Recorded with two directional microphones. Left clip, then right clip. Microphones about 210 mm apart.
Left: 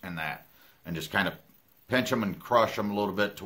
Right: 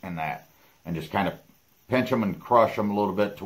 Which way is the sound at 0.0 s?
5° left (ahead or behind).